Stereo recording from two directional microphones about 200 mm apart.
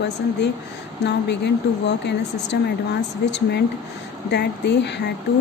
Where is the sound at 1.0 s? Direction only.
60° left (ahead or behind).